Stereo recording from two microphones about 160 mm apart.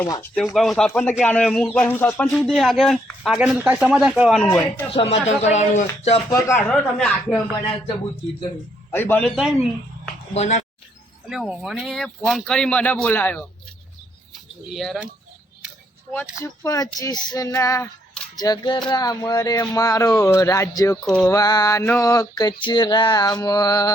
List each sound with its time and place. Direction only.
0.3 s speech: centre (ahead or behind)
2.3 s speech: centre (ahead or behind)
4.9 s speech: 35° left (ahead or behind)
6.7 s speech: 5° left (ahead or behind)
8.9 s speech: 15° left (ahead or behind)
9.3 s speech: centre (ahead or behind)
10.3 s speech: 45° left (ahead or behind)
11.3 s speech: 5° right (ahead or behind)
14.8 s speech: centre (ahead or behind)
16.4 s a sound: 20° left (ahead or behind)